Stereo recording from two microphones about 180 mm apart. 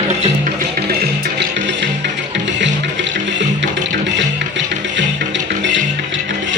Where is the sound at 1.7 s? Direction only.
80° right.